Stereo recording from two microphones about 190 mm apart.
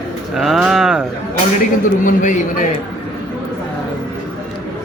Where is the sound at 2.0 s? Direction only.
45° left (ahead or behind).